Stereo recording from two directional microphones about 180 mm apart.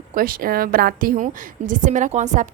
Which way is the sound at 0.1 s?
50° right (ahead or behind).